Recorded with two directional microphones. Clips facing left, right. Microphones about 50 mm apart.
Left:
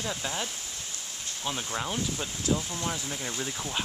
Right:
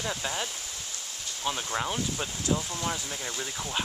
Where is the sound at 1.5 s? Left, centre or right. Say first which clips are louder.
Right 2 dB; centre.